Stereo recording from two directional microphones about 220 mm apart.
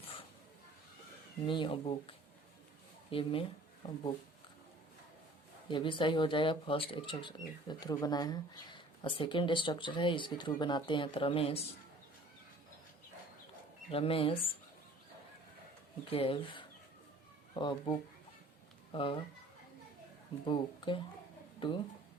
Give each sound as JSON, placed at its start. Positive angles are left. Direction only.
{"t": 1.5, "sound": "speech", "side_deg": 25}
{"t": 5.6, "sound": "speech", "side_deg": 20}
{"t": 13.9, "sound": "speech", "side_deg": 25}
{"t": 16.0, "sound": "speech", "side_deg": 25}
{"t": 20.4, "sound": "speech", "side_deg": 20}